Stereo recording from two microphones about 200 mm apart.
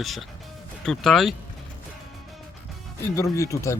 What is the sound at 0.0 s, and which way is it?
Speech, centre (ahead or behind).